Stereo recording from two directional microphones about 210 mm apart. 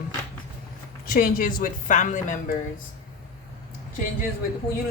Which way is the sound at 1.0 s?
45° left (ahead or behind).